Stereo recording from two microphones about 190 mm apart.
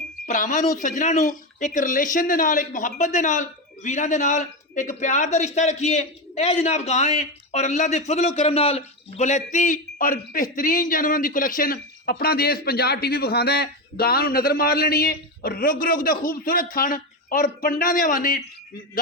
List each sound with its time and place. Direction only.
0.3 s a man's voice: 40° left (ahead or behind)